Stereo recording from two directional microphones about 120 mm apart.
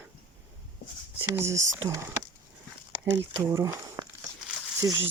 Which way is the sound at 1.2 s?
25° right (ahead or behind).